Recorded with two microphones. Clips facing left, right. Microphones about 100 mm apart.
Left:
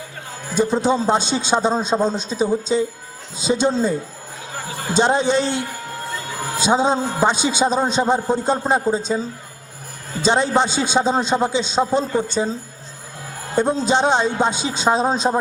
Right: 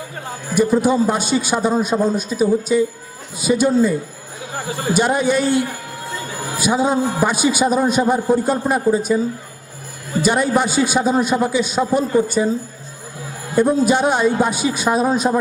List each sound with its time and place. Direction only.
0.5 s a man's voice: 25° left (ahead or behind)
4.9 s a man's voice: 25° left (ahead or behind)
13.6 s a man's voice: 25° left (ahead or behind)